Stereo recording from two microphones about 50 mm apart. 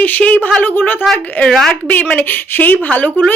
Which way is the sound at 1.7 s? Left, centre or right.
Left.